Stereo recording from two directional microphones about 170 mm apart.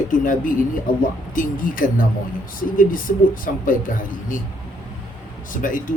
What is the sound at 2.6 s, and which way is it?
Speech, 55° left (ahead or behind).